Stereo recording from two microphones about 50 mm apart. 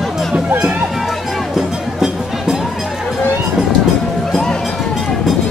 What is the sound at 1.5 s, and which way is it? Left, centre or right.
Music, centre.